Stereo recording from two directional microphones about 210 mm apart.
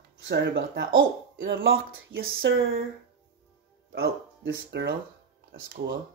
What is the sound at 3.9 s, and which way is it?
Speech, 50° right (ahead or behind).